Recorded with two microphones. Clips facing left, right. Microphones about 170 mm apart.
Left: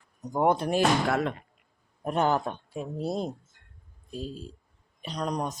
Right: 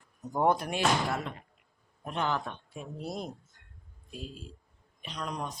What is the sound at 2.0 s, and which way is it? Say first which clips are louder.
Speech: left 7 dB; 45° left (ahead or behind).